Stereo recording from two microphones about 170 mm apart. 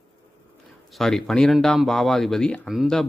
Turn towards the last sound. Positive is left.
turn(degrees=0)  # may be behind; listen again after turning